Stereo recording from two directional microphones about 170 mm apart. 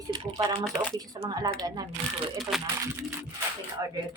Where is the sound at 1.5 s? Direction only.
25° right (ahead or behind).